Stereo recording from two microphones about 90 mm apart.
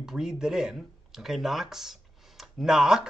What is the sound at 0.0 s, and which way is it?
Speech, 5° right (ahead or behind).